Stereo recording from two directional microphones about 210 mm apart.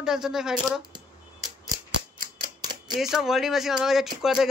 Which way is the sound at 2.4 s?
20° right (ahead or behind).